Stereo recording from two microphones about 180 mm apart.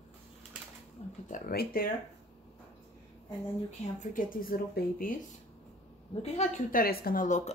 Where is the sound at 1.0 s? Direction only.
40° left (ahead or behind).